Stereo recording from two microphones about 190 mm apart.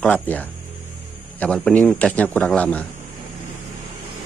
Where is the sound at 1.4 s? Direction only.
5° left (ahead or behind).